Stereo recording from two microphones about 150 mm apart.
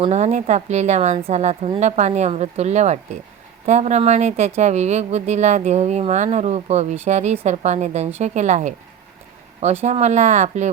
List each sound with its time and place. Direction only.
0.0 s speech: 50° right (ahead or behind)
9.8 s speech: 50° right (ahead or behind)